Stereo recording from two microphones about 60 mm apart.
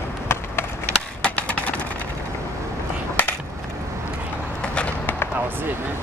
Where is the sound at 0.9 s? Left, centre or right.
Centre.